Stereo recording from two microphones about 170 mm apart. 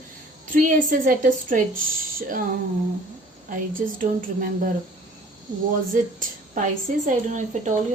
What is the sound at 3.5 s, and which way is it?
Speech, 55° right (ahead or behind).